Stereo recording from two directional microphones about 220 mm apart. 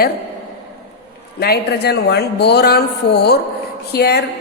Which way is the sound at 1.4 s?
45° left (ahead or behind).